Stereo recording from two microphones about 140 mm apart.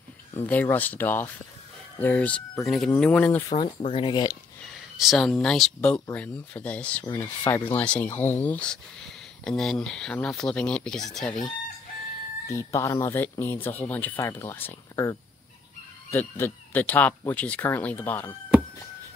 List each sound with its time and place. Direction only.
0.4 s speech: 10° left (ahead or behind)
3.4 s speech: 40° left (ahead or behind)
4.9 s speech: centre (ahead or behind)
12.4 s speech: 20° left (ahead or behind)